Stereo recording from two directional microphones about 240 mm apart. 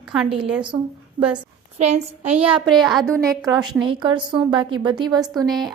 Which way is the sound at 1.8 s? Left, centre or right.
Right.